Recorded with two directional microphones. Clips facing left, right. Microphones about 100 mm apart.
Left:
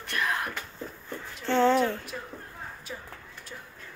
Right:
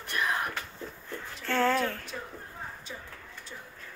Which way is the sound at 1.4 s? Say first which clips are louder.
Left 4 dB; 20° left (ahead or behind).